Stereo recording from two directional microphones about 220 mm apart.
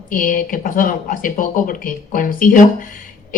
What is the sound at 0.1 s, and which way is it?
A woman's voice, 40° left (ahead or behind).